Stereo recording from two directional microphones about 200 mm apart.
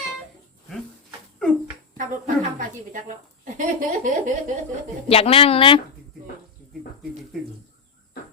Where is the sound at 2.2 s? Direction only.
40° right (ahead or behind).